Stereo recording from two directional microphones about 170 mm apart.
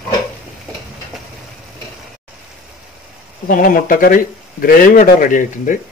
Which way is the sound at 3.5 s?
55° left (ahead or behind).